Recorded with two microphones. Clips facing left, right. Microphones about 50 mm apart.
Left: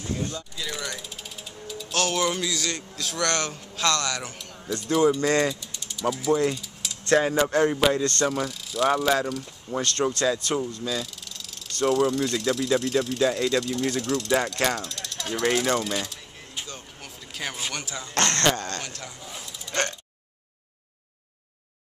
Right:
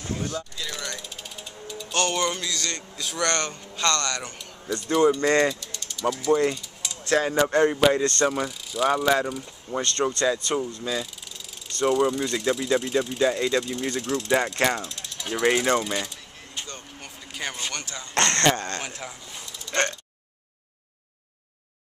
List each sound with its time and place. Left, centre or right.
0.0 s mechanisms: right
0.6 s mechanisms: centre
5.6 s a sound: centre
6.0 s speech: centre
6.3 s a sound: centre
7.2 s speech: centre
18.6 s speech: centre
19.2 s hiccup: centre
19.7 s speech: centre